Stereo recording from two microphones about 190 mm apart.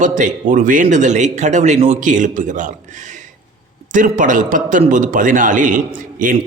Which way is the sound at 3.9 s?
45° right (ahead or behind).